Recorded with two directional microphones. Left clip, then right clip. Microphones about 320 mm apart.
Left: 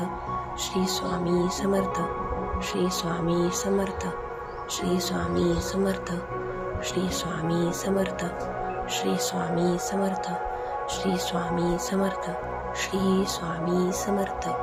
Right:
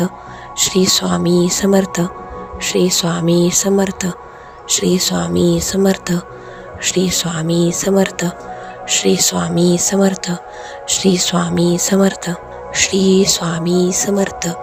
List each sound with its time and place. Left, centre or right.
0.6 s speech: right